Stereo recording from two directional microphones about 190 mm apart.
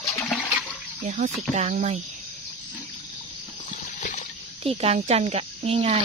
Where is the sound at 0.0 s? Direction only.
15° left (ahead or behind).